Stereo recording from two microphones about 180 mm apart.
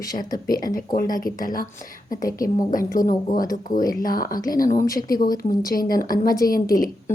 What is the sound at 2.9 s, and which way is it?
Speech, 50° left (ahead or behind).